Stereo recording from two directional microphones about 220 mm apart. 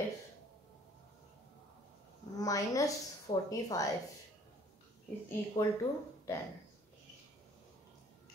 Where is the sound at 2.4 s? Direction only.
15° left (ahead or behind).